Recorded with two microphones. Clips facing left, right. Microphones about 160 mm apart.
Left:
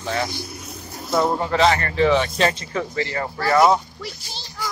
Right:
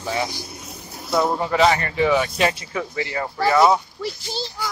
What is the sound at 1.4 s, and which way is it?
Speech, 10° right (ahead or behind).